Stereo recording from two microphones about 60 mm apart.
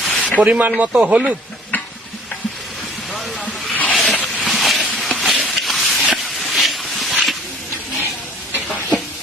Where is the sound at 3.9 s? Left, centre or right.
Centre.